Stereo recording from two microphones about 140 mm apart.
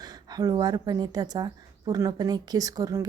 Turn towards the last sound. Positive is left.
turn(degrees=-25)  # may be behind; listen again after turning